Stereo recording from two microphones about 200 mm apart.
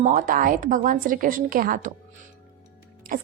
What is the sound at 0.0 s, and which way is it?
A woman's voice, 40° right (ahead or behind).